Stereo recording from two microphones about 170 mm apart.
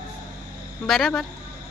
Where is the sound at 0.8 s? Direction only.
Centre (ahead or behind).